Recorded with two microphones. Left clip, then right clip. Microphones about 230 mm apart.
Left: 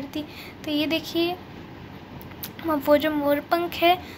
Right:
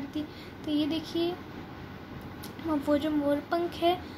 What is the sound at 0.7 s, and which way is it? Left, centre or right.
Speech, left.